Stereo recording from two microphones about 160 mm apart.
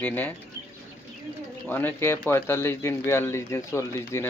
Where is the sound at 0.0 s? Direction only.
10° left (ahead or behind).